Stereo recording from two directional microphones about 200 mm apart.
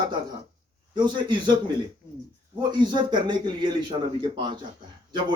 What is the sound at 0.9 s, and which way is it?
Speech, 25° right (ahead or behind).